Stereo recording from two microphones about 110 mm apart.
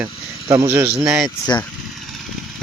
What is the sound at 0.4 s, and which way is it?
Speech, 35° right (ahead or behind).